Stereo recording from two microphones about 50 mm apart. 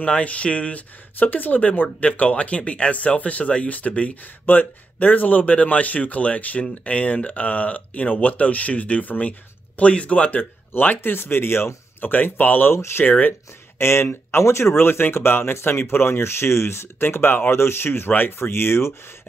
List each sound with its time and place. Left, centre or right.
0.0 s speech: left
10.7 s speech: left
12.1 s speech: left
12.7 s speech: left
13.0 s speech: left
13.7 s speech: left